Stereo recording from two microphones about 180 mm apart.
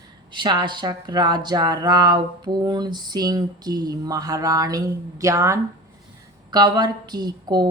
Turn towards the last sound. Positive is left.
turn(degrees=-20)  # may be behind; listen again after turning